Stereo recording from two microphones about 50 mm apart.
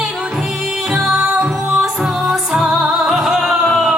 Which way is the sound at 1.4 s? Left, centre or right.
Centre.